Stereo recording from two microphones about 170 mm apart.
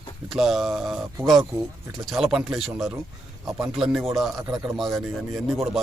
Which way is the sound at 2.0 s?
Centre (ahead or behind).